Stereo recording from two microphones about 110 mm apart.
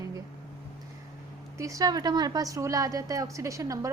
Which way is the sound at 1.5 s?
30° right (ahead or behind).